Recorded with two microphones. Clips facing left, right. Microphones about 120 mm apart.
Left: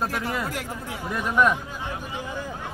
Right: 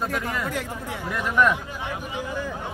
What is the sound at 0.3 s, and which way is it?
Speech, 10° left (ahead or behind).